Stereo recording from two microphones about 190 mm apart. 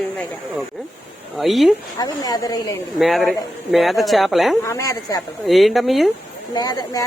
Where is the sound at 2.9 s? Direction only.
Centre (ahead or behind).